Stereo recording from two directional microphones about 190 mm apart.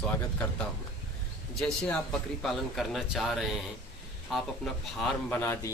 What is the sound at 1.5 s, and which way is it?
A man's voice, 5° left (ahead or behind).